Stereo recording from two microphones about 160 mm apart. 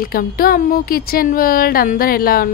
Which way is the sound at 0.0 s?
65° left (ahead or behind).